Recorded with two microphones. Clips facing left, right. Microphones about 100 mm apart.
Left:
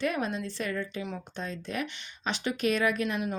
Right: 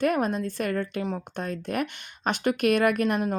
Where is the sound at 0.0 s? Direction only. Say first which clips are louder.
Right 6 dB; 50° right (ahead or behind).